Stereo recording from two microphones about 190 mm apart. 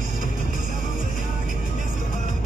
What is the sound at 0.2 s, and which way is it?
Music, 45° left (ahead or behind).